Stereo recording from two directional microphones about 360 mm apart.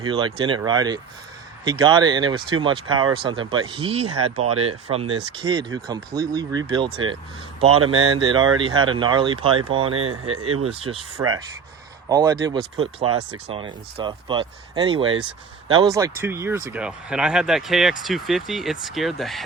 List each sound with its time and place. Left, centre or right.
0.1 s speech: centre
7.8 s speech: right
8.0 s speech: centre